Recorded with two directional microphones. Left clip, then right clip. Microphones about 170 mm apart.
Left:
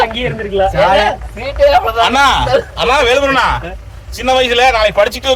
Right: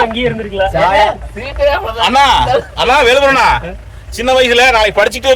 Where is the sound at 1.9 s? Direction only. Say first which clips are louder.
Right 1 dB; 30° right (ahead or behind).